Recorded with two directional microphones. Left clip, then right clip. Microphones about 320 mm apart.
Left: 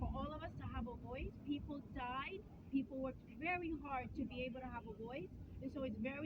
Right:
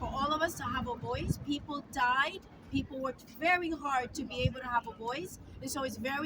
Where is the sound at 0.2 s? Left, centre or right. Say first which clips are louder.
Right 17 dB; right.